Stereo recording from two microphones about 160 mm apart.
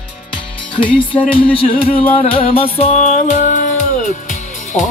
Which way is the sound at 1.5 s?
40° left (ahead or behind).